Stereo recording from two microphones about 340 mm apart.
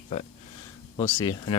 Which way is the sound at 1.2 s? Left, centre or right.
Centre.